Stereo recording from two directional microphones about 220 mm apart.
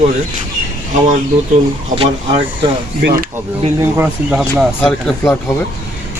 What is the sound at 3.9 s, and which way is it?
Speech, 5° right (ahead or behind).